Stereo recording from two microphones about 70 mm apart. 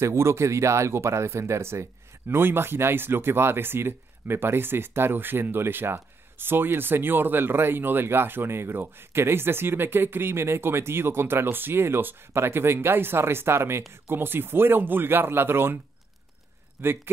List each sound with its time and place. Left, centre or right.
0.0 s speech: right
16.8 s speech: right